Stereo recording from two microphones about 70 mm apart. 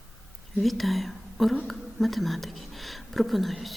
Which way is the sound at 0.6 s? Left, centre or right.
Centre.